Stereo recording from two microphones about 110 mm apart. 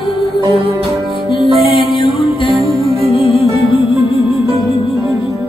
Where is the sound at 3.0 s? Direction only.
65° left (ahead or behind).